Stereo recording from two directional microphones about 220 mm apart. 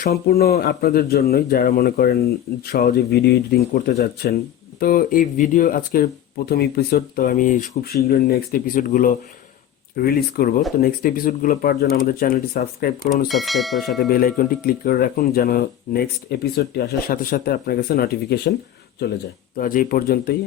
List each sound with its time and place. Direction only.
0.0 s speech: 45° left (ahead or behind)
13.2 s speech: centre (ahead or behind)
14.0 s speech: 40° left (ahead or behind)
19.5 s speech: 40° left (ahead or behind)